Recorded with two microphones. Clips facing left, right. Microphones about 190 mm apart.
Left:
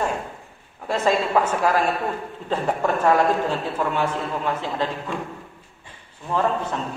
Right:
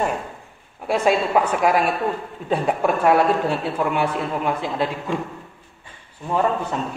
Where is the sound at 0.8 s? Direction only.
15° right (ahead or behind).